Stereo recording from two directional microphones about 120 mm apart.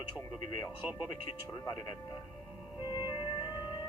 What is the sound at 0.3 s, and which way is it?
Speech, 35° left (ahead or behind).